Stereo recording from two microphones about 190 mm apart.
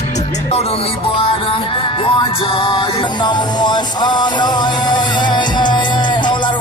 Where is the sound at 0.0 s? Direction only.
35° left (ahead or behind).